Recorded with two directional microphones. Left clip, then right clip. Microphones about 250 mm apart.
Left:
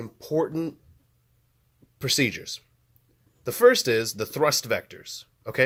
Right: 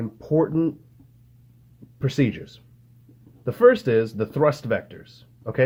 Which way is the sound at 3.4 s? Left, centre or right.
Left.